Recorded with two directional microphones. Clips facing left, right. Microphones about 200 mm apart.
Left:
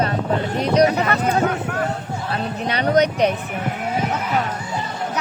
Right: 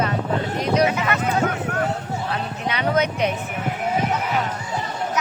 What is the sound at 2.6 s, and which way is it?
Speech, 35° left (ahead or behind).